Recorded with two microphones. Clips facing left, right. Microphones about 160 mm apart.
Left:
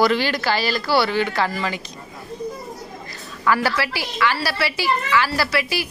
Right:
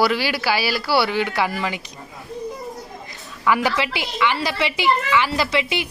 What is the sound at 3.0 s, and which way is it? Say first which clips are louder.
A woman's voice: even; 15° right (ahead or behind).